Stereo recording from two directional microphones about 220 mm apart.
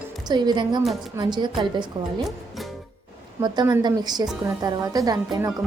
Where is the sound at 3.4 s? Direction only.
20° right (ahead or behind).